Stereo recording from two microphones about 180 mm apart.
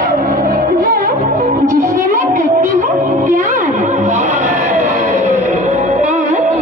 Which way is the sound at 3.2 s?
45° right (ahead or behind).